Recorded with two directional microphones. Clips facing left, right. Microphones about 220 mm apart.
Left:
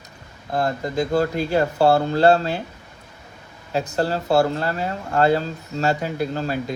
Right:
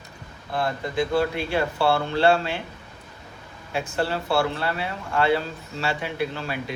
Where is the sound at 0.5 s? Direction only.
40° left (ahead or behind).